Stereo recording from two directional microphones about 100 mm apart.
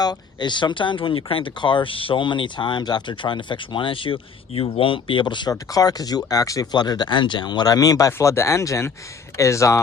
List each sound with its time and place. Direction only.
0.0 s speech: 45° left (ahead or behind); by 9.8 s 30° left (ahead or behind)